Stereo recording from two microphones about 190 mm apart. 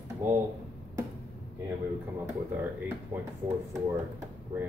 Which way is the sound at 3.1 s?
15° right (ahead or behind).